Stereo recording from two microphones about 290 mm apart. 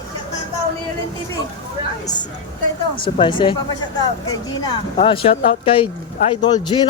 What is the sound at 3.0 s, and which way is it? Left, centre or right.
Speech, centre.